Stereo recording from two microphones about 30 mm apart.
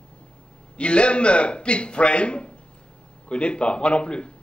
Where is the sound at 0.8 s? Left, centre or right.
Left.